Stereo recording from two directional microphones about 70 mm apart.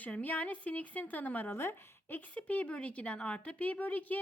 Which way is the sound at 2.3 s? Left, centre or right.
Centre.